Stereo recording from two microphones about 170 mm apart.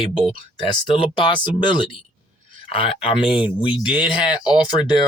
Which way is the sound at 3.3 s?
5° right (ahead or behind).